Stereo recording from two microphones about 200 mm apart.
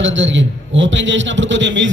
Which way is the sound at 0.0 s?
65° right (ahead or behind).